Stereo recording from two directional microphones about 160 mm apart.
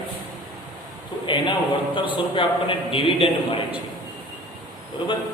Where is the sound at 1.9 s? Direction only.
30° left (ahead or behind).